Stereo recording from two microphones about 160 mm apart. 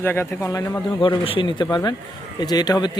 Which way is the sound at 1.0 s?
35° left (ahead or behind).